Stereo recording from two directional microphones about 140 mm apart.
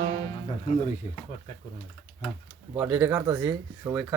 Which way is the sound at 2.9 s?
15° right (ahead or behind).